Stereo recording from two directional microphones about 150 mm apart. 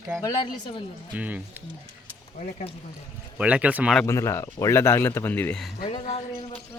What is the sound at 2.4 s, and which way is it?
Speech, 50° left (ahead or behind).